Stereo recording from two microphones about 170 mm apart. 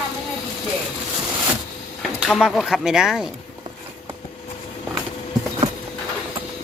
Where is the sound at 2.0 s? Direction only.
Centre (ahead or behind).